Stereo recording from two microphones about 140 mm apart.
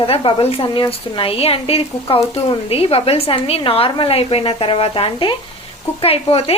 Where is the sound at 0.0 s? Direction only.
40° left (ahead or behind).